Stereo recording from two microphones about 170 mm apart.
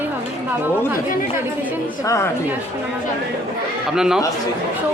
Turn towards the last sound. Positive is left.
turn(degrees=-5)  # may be behind; listen again after turning